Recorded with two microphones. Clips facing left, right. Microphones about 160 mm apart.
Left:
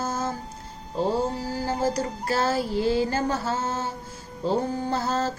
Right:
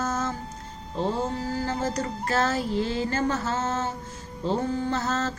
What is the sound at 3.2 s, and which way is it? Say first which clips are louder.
Mantra: even; 35° left (ahead or behind).